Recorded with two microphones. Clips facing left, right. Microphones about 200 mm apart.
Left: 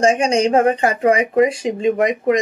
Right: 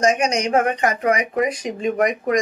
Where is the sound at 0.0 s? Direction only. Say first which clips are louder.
Left 4 dB; 30° left (ahead or behind).